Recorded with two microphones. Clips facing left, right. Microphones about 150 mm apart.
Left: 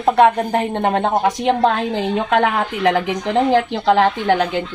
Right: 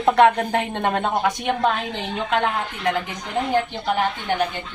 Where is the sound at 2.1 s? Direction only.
70° left (ahead or behind); by 4.6 s 90° left.